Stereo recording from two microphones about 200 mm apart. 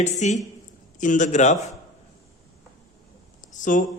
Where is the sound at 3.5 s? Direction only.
40° left (ahead or behind).